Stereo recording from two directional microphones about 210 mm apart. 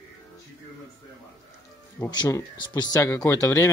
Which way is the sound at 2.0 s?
15° left (ahead or behind).